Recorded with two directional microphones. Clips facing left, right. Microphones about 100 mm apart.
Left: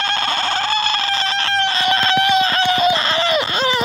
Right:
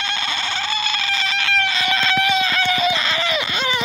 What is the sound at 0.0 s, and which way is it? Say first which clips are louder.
Chicken: left 5 dB; 45° left (ahead or behind).